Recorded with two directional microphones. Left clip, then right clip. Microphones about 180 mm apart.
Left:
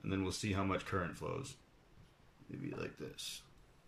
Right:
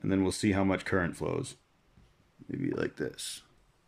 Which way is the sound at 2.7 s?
50° right (ahead or behind).